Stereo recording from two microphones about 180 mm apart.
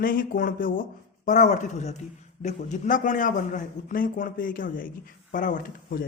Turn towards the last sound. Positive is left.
turn(degrees=50)  # may be behind; listen again after turning